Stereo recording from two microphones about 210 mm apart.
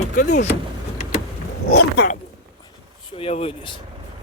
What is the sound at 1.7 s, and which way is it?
Speech, 55° left (ahead or behind).